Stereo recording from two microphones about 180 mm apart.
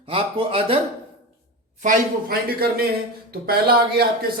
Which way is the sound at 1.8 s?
55° right (ahead or behind).